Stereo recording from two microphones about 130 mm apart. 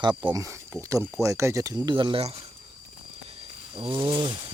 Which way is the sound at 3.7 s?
35° right (ahead or behind).